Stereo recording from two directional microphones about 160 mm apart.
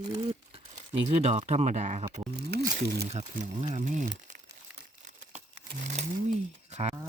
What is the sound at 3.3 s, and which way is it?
Speech, 45° right (ahead or behind).